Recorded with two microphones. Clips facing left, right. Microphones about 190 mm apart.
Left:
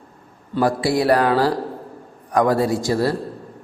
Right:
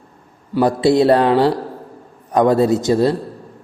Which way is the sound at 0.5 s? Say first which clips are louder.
Right 5 dB; 20° right (ahead or behind).